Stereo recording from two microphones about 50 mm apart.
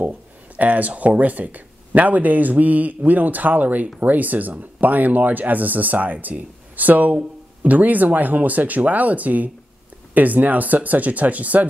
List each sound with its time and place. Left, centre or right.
0.6 s speech: right